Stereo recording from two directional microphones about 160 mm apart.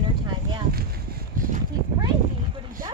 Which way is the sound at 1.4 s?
60° right (ahead or behind).